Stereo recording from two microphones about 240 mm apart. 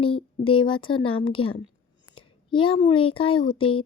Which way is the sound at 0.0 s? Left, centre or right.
Left.